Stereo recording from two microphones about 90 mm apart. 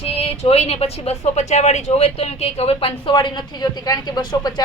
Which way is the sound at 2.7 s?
90° left.